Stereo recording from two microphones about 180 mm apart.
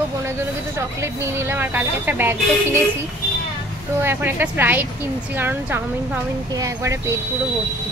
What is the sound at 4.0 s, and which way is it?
Speech, 10° right (ahead or behind).